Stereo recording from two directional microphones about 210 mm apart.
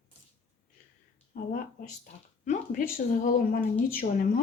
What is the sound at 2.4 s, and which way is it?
Speech, 35° left (ahead or behind).